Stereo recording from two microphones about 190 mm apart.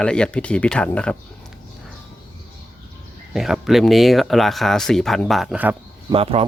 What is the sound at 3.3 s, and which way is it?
Speech, centre (ahead or behind).